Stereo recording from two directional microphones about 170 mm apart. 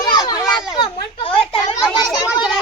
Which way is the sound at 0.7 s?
30° left (ahead or behind).